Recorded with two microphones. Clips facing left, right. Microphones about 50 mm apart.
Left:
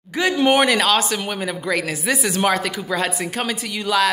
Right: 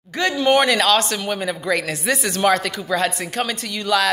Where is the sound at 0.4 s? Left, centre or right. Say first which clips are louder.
Even; centre.